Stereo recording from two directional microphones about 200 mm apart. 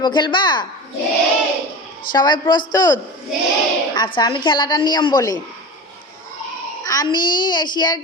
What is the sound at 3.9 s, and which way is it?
A woman's voice, 20° left (ahead or behind).